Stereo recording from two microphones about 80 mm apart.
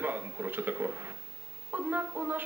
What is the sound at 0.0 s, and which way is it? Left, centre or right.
A man's voice, right.